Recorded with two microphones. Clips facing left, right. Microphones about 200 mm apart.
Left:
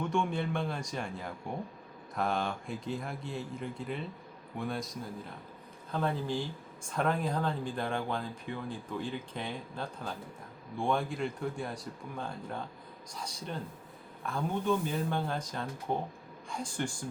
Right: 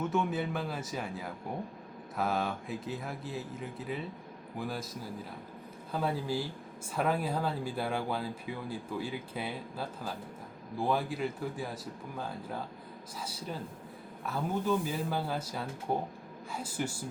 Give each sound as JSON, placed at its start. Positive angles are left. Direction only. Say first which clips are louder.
{"t": 0.0, "sound": "speech", "louder": "even", "side_deg": -5}
{"t": 5.9, "sound": "speech", "louder": "even", "side_deg": -5}